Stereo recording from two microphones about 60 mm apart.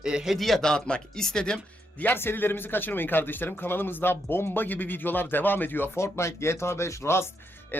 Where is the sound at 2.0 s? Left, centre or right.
Left.